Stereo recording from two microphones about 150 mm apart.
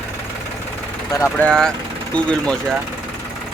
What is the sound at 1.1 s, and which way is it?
Speech, 20° left (ahead or behind).